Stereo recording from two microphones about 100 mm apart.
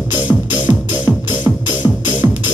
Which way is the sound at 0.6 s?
20° right (ahead or behind).